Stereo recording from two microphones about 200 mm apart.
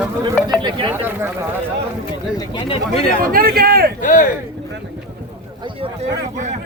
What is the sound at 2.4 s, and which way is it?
Speech, 25° left (ahead or behind).